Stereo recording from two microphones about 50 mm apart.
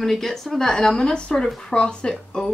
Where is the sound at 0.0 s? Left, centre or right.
Centre.